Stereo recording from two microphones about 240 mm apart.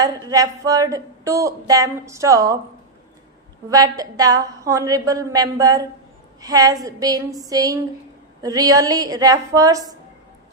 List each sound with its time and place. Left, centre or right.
0.0 s speech: centre
3.7 s speech: centre